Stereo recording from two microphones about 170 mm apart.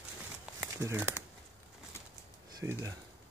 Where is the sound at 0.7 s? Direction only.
15° right (ahead or behind).